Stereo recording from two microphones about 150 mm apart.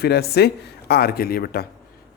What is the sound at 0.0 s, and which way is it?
Speech, 90° left.